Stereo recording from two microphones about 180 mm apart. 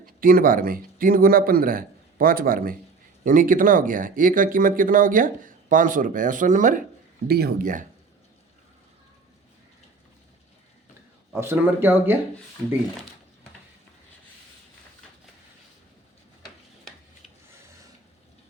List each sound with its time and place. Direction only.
0.0 s speech: 55° right (ahead or behind)
7.3 s speech: 60° right (ahead or behind)
11.3 s speech: 10° right (ahead or behind)